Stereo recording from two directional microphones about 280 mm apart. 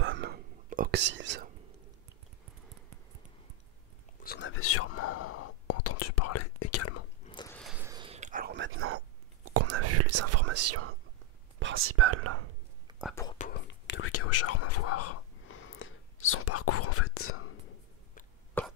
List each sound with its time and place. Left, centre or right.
0.0 s whispering: right
4.2 s whispering: left
7.2 s a sound: centre
7.5 s whispering: centre; by 12.4 s right
13.1 s whispering: centre
13.4 s whispering: left
18.6 s cough: centre